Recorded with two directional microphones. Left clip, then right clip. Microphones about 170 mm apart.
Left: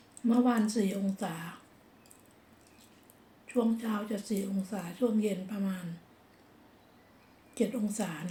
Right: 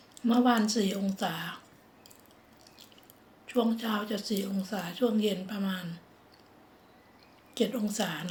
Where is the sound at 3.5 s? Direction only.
15° left (ahead or behind).